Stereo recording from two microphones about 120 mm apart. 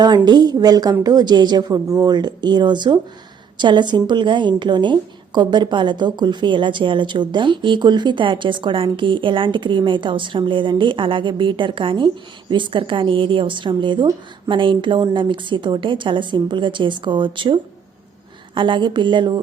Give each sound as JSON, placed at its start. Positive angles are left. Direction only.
{"t": 0.3, "sound": "a woman's voice", "side_deg": -35}